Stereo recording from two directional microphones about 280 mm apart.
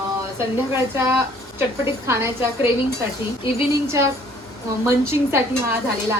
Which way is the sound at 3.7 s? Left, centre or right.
Centre.